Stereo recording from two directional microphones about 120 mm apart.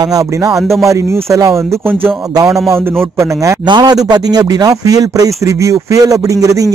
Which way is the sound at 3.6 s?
40° right (ahead or behind).